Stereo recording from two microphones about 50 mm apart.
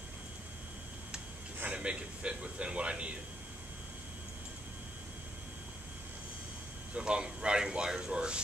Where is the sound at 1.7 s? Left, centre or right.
Right.